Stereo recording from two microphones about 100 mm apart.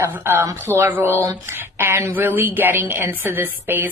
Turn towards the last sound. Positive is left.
turn(degrees=-20)  # may be behind; listen again after turning